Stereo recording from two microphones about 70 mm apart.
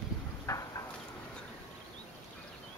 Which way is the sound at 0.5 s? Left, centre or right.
Left.